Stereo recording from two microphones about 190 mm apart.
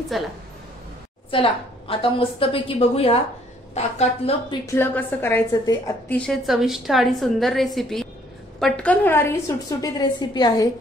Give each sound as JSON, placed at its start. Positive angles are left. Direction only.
{"t": 0.1, "sound": "a woman's voice", "side_deg": 0}
{"t": 1.3, "sound": "a woman's voice", "side_deg": 30}
{"t": 4.6, "sound": "a woman's voice", "side_deg": 10}
{"t": 6.1, "sound": "a woman's voice", "side_deg": 5}